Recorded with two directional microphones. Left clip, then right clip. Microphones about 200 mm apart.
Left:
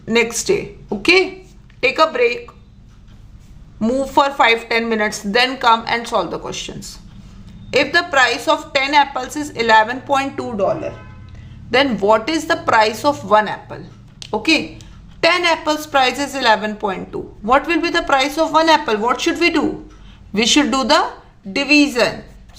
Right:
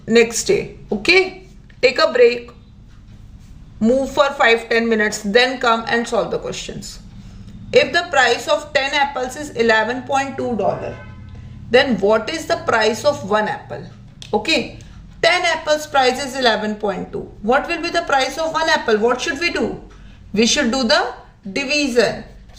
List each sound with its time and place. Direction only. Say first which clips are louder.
0.0 s speech: right 3 dB; 15° left (ahead or behind)
3.8 s a woman's voice: even; 20° left (ahead or behind)
11.7 s a woman's voice: even; 25° left (ahead or behind)
15.2 s speech: left 1 dB; 30° left (ahead or behind)